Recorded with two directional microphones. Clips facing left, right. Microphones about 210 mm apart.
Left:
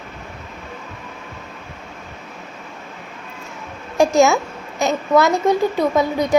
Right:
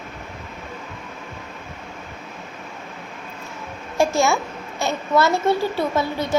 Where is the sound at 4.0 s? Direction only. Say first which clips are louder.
Left 5 dB; 20° left (ahead or behind).